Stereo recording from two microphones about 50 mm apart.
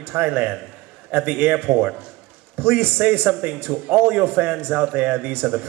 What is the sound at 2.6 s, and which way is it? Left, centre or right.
Speech, right.